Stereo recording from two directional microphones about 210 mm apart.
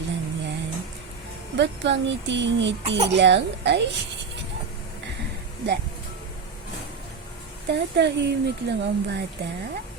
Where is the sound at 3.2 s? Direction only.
55° right (ahead or behind).